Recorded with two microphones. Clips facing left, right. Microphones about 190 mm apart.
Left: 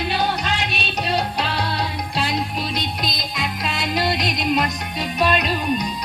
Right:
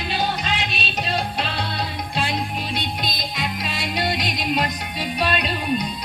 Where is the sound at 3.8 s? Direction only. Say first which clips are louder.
Left 3 dB; 45° left (ahead or behind).